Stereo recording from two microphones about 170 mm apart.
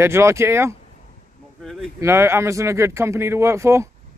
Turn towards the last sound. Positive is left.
turn(degrees=-15)  # may be behind; listen again after turning